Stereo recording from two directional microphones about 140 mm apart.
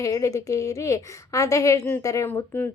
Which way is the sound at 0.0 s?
25° left (ahead or behind).